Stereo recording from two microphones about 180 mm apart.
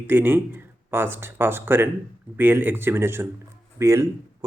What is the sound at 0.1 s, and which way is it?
Speech, 10° right (ahead or behind).